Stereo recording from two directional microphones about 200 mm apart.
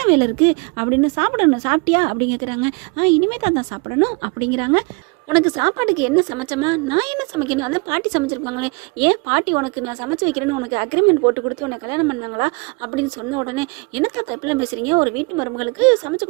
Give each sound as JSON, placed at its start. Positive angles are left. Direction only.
{"t": 0.0, "sound": "a woman's voice", "side_deg": -30}